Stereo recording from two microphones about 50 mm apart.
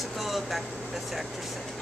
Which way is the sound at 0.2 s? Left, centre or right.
Centre.